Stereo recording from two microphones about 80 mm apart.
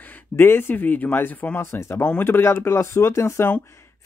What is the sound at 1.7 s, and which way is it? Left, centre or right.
Speech, left.